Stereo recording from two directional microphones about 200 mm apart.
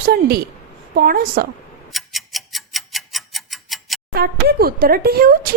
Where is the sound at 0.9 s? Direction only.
50° right (ahead or behind).